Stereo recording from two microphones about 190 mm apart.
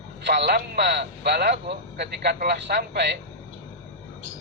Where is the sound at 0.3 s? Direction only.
60° right (ahead or behind).